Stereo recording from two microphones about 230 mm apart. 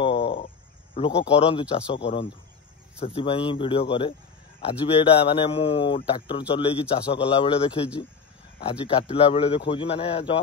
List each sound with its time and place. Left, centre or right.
0.0 s a sound: left
1.0 s a man's voice: left
9.1 s a man's voice: left